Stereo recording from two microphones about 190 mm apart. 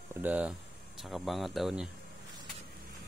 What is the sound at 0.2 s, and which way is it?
Speech, 10° right (ahead or behind).